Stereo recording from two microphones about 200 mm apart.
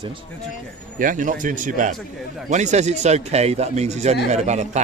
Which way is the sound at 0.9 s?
40° right (ahead or behind).